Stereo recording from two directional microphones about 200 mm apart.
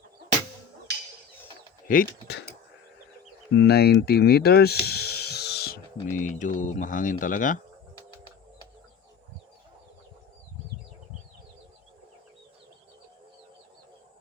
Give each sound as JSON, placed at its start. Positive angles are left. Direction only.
{"t": 1.9, "sound": "speech", "side_deg": 50}
{"t": 3.5, "sound": "speech", "side_deg": 60}